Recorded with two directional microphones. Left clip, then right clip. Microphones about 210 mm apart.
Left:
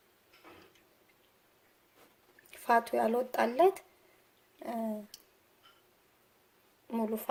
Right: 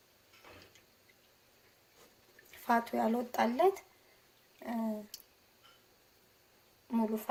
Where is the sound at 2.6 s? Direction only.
50° left (ahead or behind).